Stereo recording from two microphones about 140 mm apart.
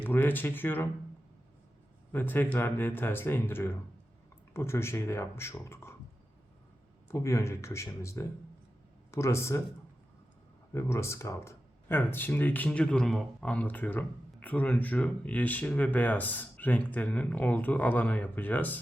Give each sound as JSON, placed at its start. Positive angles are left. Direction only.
{"t": 0.0, "sound": "speech", "side_deg": 15}
{"t": 2.1, "sound": "speech", "side_deg": 15}
{"t": 7.1, "sound": "speech", "side_deg": 20}
{"t": 10.8, "sound": "speech", "side_deg": 20}